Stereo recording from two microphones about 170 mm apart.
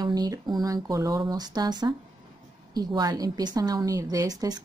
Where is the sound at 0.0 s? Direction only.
25° right (ahead or behind).